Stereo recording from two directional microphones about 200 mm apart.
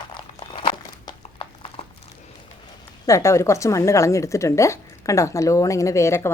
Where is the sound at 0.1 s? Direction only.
25° left (ahead or behind).